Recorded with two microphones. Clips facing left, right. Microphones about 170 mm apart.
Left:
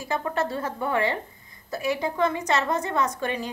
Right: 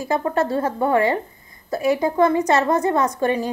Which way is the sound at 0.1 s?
40° right (ahead or behind).